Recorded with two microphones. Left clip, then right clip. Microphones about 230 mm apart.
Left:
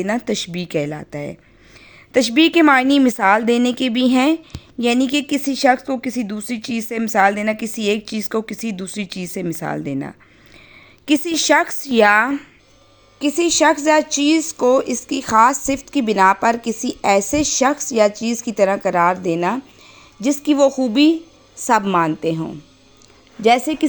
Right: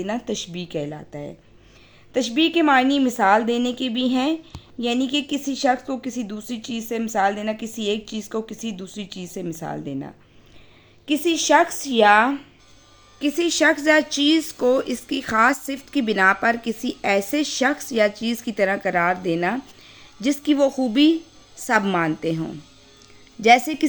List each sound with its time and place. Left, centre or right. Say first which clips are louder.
0.0 s a woman's voice: left 6 dB; left
13.1 s a woman's voice: left 4 dB; centre